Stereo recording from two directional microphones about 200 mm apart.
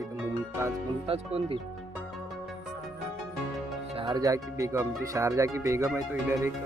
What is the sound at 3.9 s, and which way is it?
Speech, 25° right (ahead or behind).